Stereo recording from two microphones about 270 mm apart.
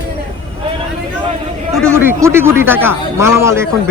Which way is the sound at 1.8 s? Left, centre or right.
Centre.